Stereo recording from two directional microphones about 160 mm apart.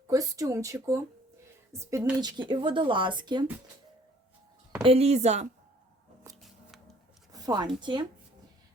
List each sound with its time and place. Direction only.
0.1 s a woman's voice: 20° right (ahead or behind)
2.1 s speech: 25° right (ahead or behind)
4.8 s speech: 40° right (ahead or behind)
6.4 s a sound: centre (ahead or behind)
7.3 s speech: 25° right (ahead or behind)